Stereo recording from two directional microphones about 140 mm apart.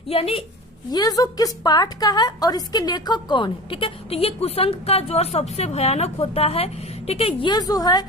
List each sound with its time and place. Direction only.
0.1 s a woman's voice: 45° left (ahead or behind)
0.9 s a woman's voice: 30° left (ahead or behind)